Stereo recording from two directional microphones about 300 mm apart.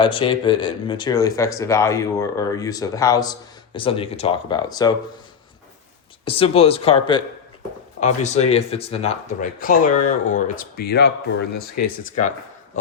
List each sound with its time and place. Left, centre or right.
0.0 s speech: centre
6.2 s speech: centre